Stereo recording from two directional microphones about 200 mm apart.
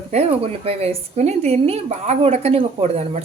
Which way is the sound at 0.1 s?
30° right (ahead or behind).